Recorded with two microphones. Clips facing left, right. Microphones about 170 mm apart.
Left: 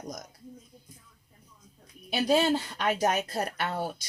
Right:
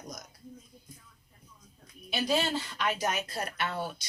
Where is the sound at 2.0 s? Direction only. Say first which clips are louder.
Left 5 dB; 50° left (ahead or behind).